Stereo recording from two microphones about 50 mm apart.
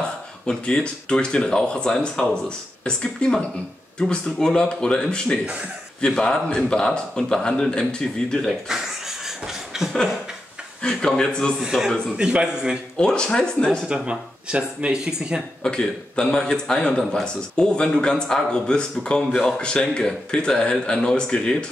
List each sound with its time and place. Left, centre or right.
0.5 s a man's voice: centre
8.5 s beatboxing: centre
10.8 s a man's voice: centre
11.6 s a man's voice: centre
12.9 s a man's voice: centre
13.8 s speech: right
15.6 s a man's voice: centre